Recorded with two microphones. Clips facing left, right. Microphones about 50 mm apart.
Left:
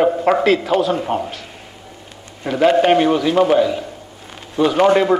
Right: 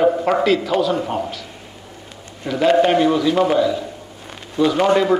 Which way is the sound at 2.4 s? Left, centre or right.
Left.